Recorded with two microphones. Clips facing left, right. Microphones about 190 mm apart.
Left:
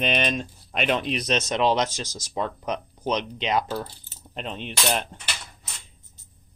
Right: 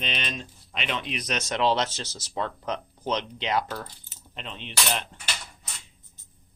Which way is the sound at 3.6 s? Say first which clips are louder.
Left 5 dB; 30° left (ahead or behind).